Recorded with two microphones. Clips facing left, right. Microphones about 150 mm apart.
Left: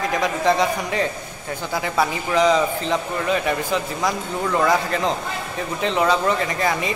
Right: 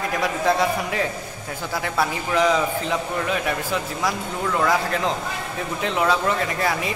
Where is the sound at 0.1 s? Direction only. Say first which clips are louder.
Left 1 dB; 5° right (ahead or behind).